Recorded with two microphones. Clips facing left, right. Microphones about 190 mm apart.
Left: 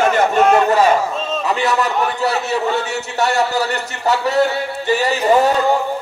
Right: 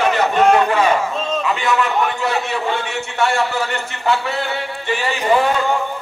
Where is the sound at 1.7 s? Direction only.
40° left (ahead or behind).